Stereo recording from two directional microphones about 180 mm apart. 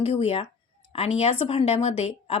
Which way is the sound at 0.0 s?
35° left (ahead or behind).